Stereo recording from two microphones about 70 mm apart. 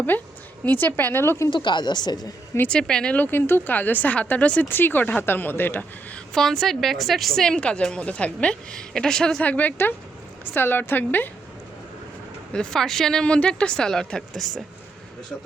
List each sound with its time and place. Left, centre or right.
0.1 s a woman's voice: left
1.6 s a woman's voice: left
2.6 s a woman's voice: centre
3.2 s a woman's voice: left
6.3 s a woman's voice: centre
9.4 s a woman's voice: left
12.5 s a woman's voice: centre